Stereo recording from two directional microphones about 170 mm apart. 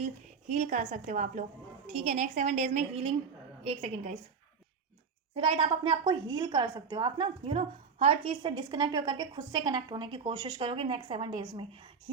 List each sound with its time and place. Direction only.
0.0 s a woman's voice: 45° right (ahead or behind)
5.3 s a woman's voice: 30° right (ahead or behind)